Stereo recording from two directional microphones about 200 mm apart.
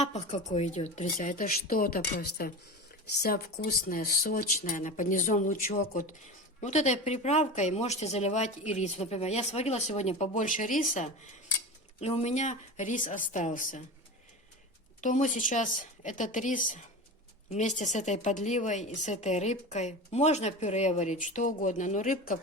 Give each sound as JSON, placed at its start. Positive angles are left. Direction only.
{"t": 0.0, "sound": "speech", "side_deg": 35}
{"t": 15.0, "sound": "speech", "side_deg": 40}